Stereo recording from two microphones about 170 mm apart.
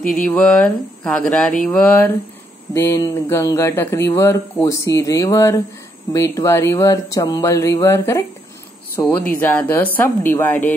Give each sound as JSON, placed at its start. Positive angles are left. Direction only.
{"t": 0.1, "sound": "speech", "side_deg": 10}